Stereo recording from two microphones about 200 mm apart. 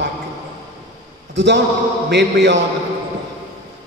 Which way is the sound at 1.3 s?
60° right (ahead or behind).